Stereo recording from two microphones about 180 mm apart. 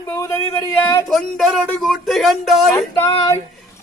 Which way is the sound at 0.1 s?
15° left (ahead or behind).